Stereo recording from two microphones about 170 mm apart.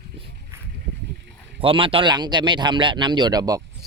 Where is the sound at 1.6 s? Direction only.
30° right (ahead or behind).